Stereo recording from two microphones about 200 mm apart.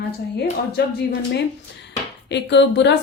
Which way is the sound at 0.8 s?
55° left (ahead or behind).